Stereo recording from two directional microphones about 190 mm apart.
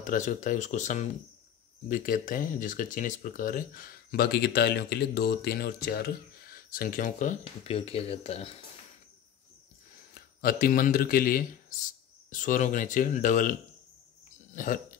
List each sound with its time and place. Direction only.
0.0 s speech: 45° left (ahead or behind)
10.1 s speech: 50° left (ahead or behind)